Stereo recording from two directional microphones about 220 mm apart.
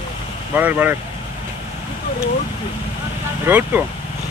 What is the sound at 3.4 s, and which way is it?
Speech, 10° right (ahead or behind).